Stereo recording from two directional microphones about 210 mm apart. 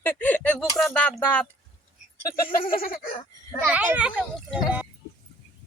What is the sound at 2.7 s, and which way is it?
Speech, 40° left (ahead or behind).